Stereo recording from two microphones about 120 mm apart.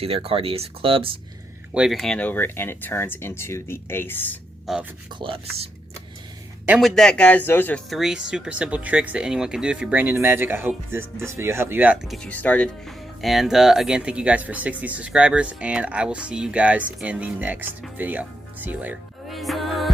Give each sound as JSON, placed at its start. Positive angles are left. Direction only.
{"t": 0.0, "sound": "speech", "side_deg": -55}
{"t": 1.7, "sound": "speech", "side_deg": -5}
{"t": 4.6, "sound": "speech", "side_deg": -5}
{"t": 5.2, "sound": "speech", "side_deg": -50}
{"t": 6.7, "sound": "speech", "side_deg": 5}
{"t": 7.9, "sound": "speech", "side_deg": 0}
{"t": 12.0, "sound": "speech", "side_deg": 0}
{"t": 12.3, "sound": "speech", "side_deg": 10}
{"t": 19.3, "sound": "music", "side_deg": 0}